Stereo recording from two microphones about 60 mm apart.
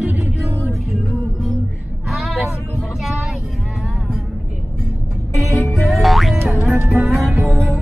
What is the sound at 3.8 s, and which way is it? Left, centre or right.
Music, centre.